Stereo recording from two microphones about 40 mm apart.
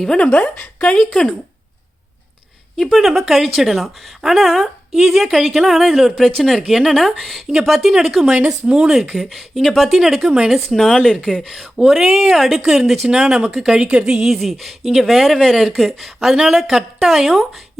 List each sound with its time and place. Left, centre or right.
0.3 s a woman's voice: left
0.9 s speech: centre
2.7 s speech: centre
4.9 s a woman's voice: centre
8.4 s speech: centre
9.1 s speech: centre
9.9 s speech: centre
10.7 s speech: centre
11.1 s speech: centre
11.4 s speech: centre
14.5 s speech: centre
16.3 s speech: centre